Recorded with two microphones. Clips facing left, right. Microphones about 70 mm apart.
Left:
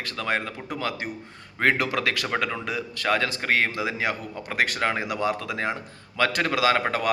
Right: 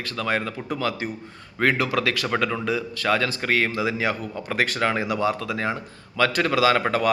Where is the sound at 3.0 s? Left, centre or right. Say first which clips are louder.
Left 1 dB; left.